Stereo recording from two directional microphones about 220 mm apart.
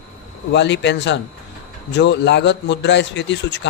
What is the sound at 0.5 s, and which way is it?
A man's voice, 50° left (ahead or behind).